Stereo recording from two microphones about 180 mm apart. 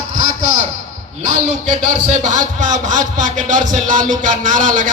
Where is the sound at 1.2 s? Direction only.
45° right (ahead or behind).